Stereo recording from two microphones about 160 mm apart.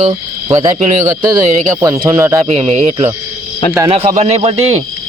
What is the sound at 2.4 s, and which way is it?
Speech, 40° right (ahead or behind).